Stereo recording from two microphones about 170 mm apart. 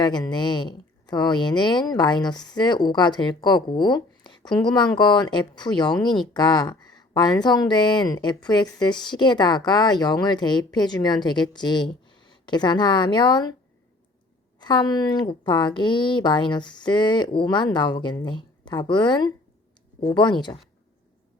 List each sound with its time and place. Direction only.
0.0 s speech: 25° left (ahead or behind)
14.6 s speech: 25° left (ahead or behind)